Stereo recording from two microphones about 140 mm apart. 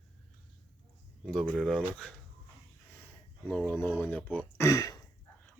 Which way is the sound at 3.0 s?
10° left (ahead or behind).